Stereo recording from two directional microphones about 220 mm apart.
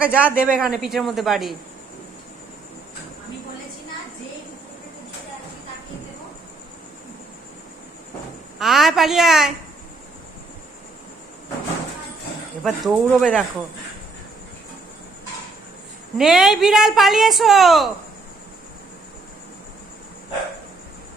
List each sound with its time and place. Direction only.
0.0 s a woman's voice: 5° right (ahead or behind)
8.5 s a woman's voice: centre (ahead or behind)
12.6 s a woman's voice: centre (ahead or behind)
16.1 s a woman's voice: centre (ahead or behind)